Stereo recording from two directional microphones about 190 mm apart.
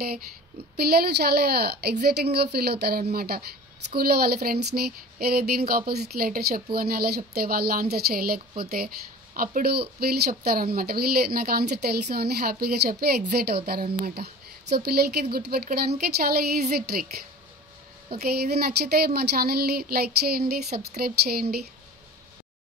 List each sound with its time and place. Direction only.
0.7 s speech: 55° right (ahead or behind)